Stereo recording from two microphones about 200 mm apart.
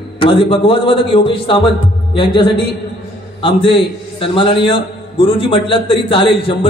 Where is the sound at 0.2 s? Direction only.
25° left (ahead or behind).